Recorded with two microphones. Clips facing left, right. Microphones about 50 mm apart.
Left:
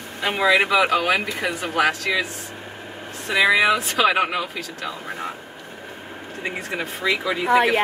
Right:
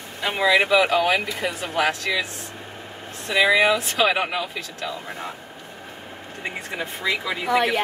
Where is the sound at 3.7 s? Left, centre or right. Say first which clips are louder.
Left 2 dB; left.